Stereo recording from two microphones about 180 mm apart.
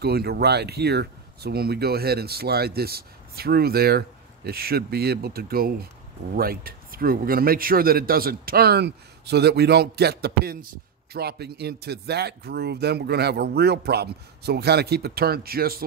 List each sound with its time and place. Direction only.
0.0 s speech: 65° right (ahead or behind)